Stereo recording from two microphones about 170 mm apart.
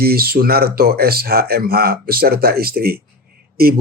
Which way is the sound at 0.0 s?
65° right (ahead or behind).